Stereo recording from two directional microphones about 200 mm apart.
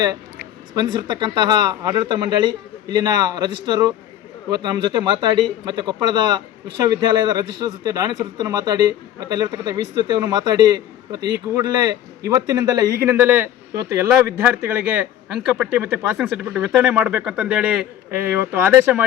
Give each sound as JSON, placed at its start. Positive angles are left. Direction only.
{"t": 0.7, "sound": "a man's voice", "side_deg": -20}